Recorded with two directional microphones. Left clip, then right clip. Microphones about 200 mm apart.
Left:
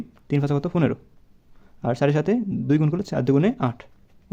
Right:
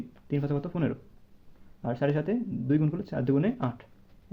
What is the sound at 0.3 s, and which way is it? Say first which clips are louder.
Speech: left 7 dB; 45° left (ahead or behind).